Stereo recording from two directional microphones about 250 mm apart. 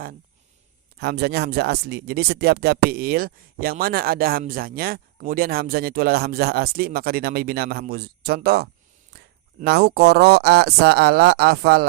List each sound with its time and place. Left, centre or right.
1.0 s speech: right